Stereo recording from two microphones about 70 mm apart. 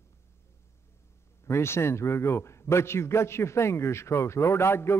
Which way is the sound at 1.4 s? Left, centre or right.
Left.